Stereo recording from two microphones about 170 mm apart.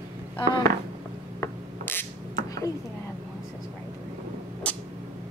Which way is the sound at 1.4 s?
10° left (ahead or behind).